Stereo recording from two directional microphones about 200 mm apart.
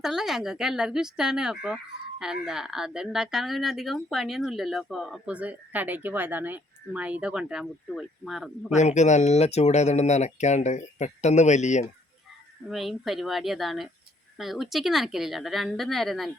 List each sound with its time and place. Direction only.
0.0 s speech: centre (ahead or behind)
8.7 s speech: 35° left (ahead or behind)
12.7 s speech: centre (ahead or behind)